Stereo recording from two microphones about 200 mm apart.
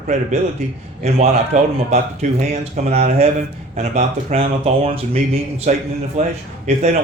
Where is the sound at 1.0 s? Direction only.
35° right (ahead or behind).